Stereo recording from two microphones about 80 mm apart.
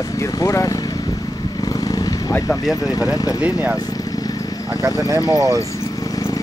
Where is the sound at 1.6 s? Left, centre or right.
Left.